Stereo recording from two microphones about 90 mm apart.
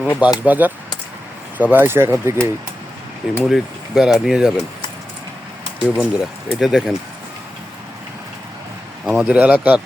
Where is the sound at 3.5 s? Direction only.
Centre (ahead or behind).